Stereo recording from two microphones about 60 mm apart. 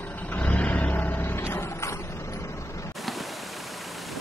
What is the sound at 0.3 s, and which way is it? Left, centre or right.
Vehicle, left.